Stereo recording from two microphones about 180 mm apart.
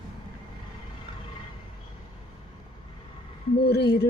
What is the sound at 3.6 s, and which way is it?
Speech, 65° left (ahead or behind).